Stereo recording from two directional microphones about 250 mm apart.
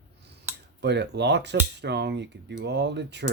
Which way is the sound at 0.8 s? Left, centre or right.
Right.